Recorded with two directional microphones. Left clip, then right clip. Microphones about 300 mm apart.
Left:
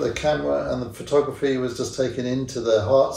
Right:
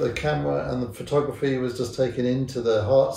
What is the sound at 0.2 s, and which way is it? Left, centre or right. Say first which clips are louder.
Speech: left 3 dB; centre.